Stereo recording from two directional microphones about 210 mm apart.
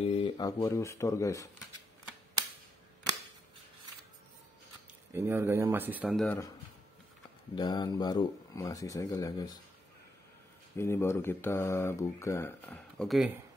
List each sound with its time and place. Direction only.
0.0 s speech: 25° left (ahead or behind)
5.1 s speech: 10° right (ahead or behind)
6.2 s speech: 15° left (ahead or behind)
7.5 s speech: 20° left (ahead or behind)
10.8 s speech: 10° left (ahead or behind)